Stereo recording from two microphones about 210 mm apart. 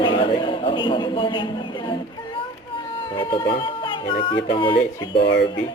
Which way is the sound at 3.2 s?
25° left (ahead or behind).